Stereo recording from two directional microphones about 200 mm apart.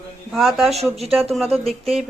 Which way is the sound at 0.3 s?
Centre (ahead or behind).